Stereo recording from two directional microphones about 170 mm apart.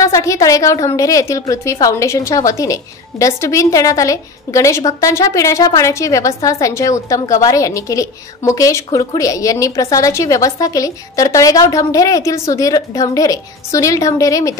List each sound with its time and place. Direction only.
0.0 s a woman's voice: 20° left (ahead or behind)